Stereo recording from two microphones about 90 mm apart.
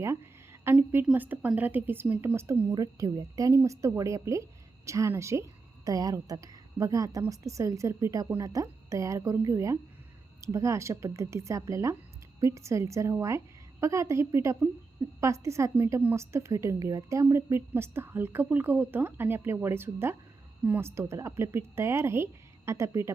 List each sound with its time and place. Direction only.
0.0 s a sound: 30° right (ahead or behind)
1.1 s a woman's voice: 20° right (ahead or behind)
2.7 s a woman's voice: 45° right (ahead or behind)